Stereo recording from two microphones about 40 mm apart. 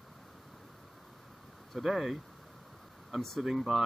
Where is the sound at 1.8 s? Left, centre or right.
Centre.